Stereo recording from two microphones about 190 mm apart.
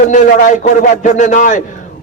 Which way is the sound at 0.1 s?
40° left (ahead or behind).